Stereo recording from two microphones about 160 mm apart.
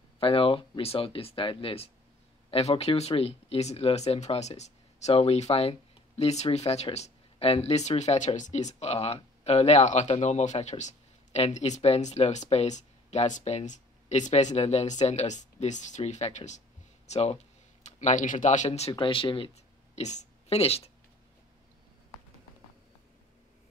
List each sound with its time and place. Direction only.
0.2 s speech: 35° left (ahead or behind)
20.0 s a woman's voice: 45° left (ahead or behind)